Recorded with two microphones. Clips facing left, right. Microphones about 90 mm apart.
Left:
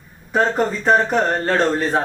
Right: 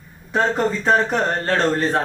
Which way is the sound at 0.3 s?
5° left (ahead or behind).